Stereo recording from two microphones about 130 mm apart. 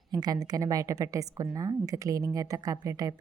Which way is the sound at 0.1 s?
30° right (ahead or behind).